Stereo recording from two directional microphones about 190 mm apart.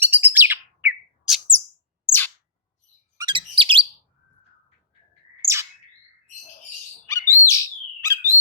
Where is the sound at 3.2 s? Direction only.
25° right (ahead or behind).